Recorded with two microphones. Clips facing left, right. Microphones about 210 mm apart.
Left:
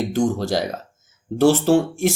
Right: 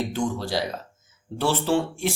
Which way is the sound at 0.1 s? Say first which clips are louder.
Left 6 dB; 45° left (ahead or behind).